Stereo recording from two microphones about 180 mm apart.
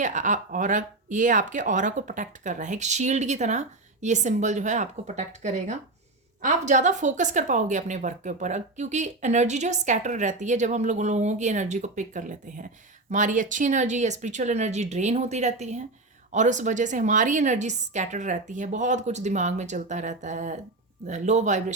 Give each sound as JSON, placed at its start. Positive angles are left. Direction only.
{"t": 0.0, "sound": "a woman's voice", "side_deg": -45}